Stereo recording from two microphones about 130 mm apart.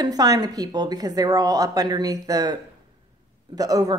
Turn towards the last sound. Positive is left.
turn(degrees=-30)  # may be behind; listen again after turning